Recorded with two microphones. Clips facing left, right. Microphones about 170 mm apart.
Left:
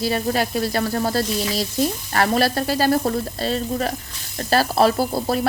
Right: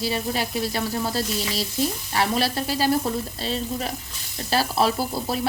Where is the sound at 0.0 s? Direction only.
50° left (ahead or behind).